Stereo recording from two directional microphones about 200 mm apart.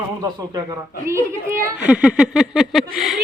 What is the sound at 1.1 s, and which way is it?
Speech, 15° right (ahead or behind).